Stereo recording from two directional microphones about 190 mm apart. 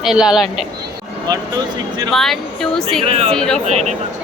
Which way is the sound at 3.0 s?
30° right (ahead or behind).